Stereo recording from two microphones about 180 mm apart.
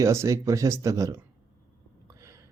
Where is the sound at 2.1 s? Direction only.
15° right (ahead or behind).